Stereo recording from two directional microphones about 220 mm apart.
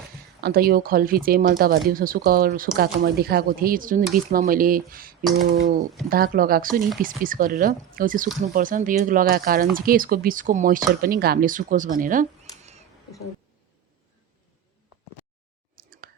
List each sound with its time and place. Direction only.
0.4 s speech: 45° right (ahead or behind)
5.4 s speech: 65° right (ahead or behind)
6.1 s speech: 40° right (ahead or behind)
15.7 s a sound: 40° right (ahead or behind)